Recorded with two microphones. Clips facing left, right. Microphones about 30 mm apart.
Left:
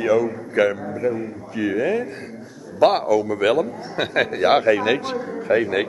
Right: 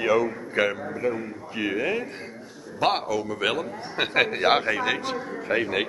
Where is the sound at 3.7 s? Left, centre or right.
Centre.